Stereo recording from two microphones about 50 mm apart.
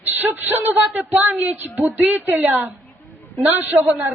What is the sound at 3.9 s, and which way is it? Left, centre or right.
Speech, right.